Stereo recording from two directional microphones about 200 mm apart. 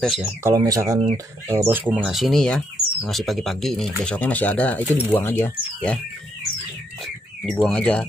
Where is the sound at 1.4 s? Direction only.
10° right (ahead or behind); by 6.0 s 5° left (ahead or behind).